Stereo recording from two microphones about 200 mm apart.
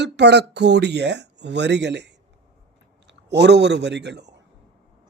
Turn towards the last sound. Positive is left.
turn(degrees=-60)  # may be behind; listen again after turning